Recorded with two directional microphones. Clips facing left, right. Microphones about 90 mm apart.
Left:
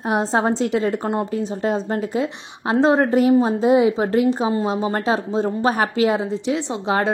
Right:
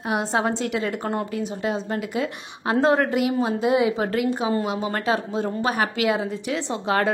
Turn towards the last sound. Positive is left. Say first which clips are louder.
# left 2 dB
turn(degrees=20)  # may be behind; listen again after turning